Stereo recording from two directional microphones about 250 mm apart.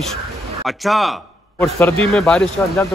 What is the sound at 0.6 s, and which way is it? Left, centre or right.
Speech, centre.